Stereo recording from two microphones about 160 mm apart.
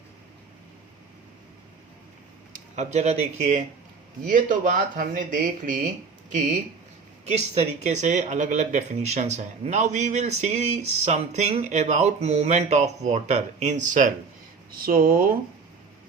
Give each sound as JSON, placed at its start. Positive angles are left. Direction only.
{"t": 2.5, "sound": "speech", "side_deg": -45}
{"t": 4.3, "sound": "speech", "side_deg": -55}
{"t": 7.3, "sound": "speech", "side_deg": -40}
{"t": 14.7, "sound": "speech", "side_deg": -65}